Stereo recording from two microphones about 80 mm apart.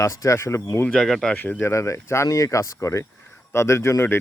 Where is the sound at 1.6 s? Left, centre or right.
Left.